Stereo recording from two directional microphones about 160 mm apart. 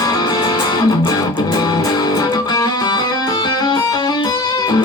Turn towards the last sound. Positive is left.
turn(degrees=25)  # may be behind; listen again after turning